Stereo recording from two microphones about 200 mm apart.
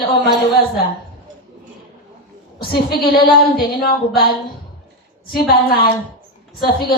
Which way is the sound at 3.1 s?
50° left (ahead or behind).